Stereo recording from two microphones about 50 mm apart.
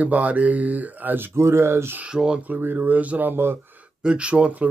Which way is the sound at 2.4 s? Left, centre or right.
Right.